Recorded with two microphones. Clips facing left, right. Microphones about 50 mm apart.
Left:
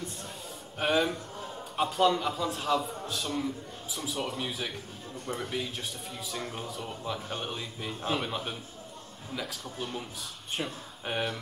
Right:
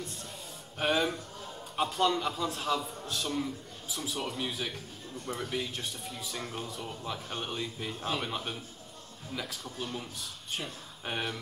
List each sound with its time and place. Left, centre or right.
0.7 s a man's voice: centre
9.8 s speech: centre
10.6 s speech: left
11.1 s a man's voice: centre